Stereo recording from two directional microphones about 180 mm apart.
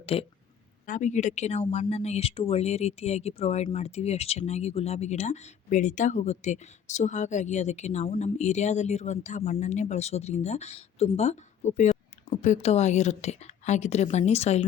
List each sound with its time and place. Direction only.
0.0 s a woman's voice: 30° left (ahead or behind)